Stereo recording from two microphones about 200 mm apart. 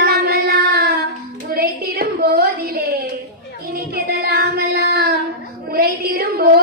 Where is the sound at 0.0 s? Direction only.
50° right (ahead or behind).